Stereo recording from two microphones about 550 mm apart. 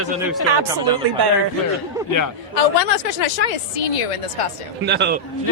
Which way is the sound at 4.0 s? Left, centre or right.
Left.